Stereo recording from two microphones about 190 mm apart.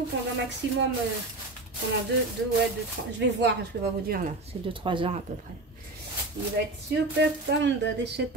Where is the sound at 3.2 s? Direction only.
65° right (ahead or behind).